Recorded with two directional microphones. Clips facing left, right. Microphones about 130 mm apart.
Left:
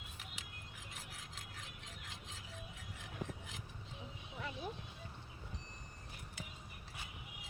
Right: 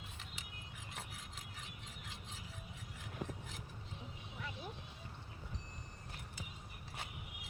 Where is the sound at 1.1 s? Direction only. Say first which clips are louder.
Even; centre (ahead or behind).